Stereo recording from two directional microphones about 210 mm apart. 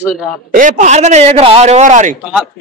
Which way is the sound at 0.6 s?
35° right (ahead or behind).